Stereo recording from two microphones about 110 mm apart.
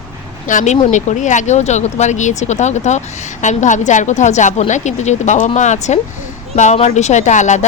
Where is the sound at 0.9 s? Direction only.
90° left.